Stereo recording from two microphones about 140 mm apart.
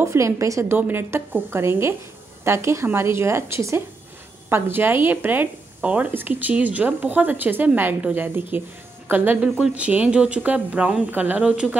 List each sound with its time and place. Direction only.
0.0 s a woman's voice: 20° right (ahead or behind)